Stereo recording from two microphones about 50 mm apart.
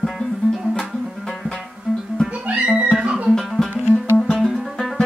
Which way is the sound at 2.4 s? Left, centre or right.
Right.